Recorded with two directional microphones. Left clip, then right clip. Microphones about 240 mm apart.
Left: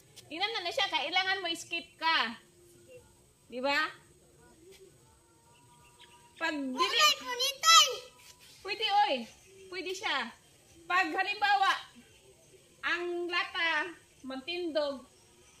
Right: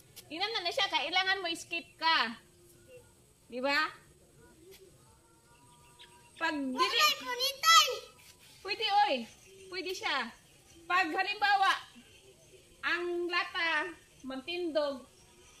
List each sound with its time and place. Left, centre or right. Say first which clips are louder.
0.1 s a woman's voice: left 1 dB; right
3.4 s speech: even; right
6.9 s a child's voice: left 4 dB; centre
8.6 s a woman's voice: even; centre
12.8 s a child's voice: even; centre